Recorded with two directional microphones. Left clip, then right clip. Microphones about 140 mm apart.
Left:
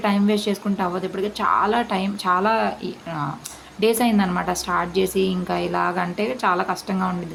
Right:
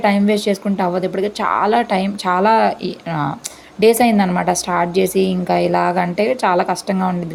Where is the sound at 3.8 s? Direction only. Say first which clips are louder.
Right 7 dB; 40° right (ahead or behind).